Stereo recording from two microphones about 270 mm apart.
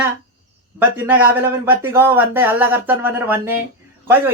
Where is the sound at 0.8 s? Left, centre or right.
Centre.